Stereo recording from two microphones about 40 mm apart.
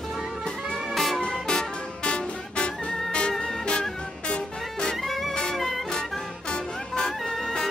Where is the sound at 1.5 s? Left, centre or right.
Left.